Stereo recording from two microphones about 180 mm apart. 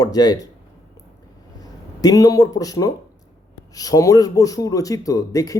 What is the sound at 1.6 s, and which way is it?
A man's voice, 20° left (ahead or behind).